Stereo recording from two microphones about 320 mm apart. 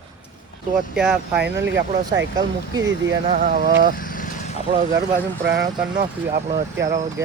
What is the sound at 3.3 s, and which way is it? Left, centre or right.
Speech, right.